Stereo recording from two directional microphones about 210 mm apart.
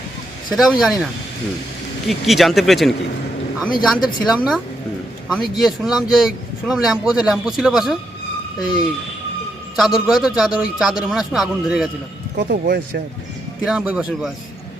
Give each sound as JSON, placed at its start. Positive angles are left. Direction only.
{"t": 0.5, "sound": "speech", "side_deg": 0}
{"t": 2.0, "sound": "speech", "side_deg": 0}
{"t": 9.7, "sound": "speech", "side_deg": 0}
{"t": 12.4, "sound": "speech", "side_deg": -45}
{"t": 13.7, "sound": "speech", "side_deg": -5}